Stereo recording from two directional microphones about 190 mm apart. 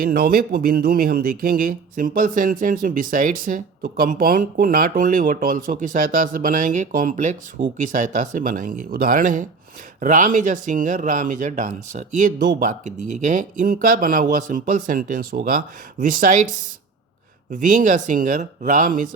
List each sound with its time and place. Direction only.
0.0 s speech: 50° right (ahead or behind)
7.6 s speech: 30° right (ahead or behind)
7.9 s speech: 45° right (ahead or behind)
17.5 s speech: 45° right (ahead or behind)